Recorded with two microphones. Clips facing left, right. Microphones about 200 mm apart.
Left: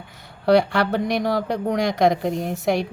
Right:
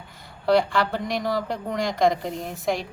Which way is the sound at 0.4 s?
65° left (ahead or behind).